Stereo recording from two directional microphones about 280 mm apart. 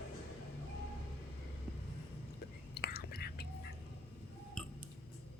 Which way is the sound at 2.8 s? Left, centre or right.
Left.